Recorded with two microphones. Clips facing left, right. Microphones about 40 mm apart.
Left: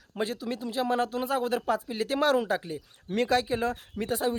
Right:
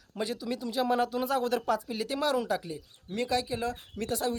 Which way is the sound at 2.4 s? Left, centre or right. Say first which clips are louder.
Left 2 dB; left.